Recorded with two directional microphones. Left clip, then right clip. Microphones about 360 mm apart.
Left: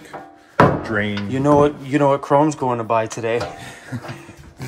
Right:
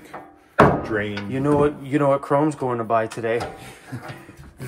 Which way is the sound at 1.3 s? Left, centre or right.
Centre.